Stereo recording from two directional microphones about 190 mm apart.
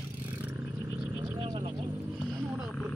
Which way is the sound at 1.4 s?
25° right (ahead or behind).